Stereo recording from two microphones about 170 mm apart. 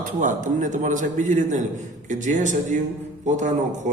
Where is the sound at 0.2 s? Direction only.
50° right (ahead or behind).